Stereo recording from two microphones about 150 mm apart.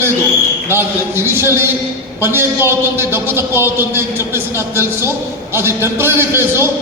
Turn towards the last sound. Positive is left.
turn(degrees=-15)  # may be behind; listen again after turning